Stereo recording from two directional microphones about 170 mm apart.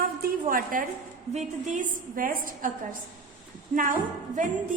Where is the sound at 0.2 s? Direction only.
55° right (ahead or behind).